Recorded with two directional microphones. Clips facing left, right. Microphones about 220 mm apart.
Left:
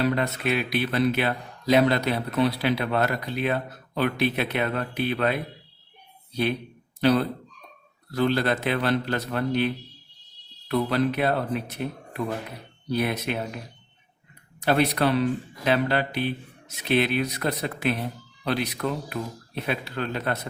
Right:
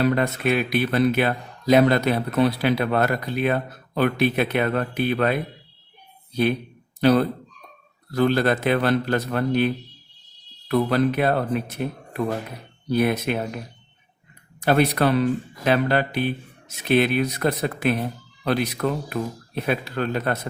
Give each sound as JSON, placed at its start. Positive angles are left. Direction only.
{"t": 0.0, "sound": "speech", "side_deg": -50}
{"t": 7.0, "sound": "speech", "side_deg": -50}
{"t": 14.6, "sound": "speech", "side_deg": -50}